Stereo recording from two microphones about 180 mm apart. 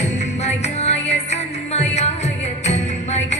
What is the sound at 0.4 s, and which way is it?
Music, 40° left (ahead or behind).